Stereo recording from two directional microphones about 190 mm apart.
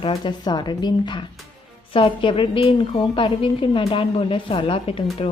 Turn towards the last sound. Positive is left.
turn(degrees=30)  # may be behind; listen again after turning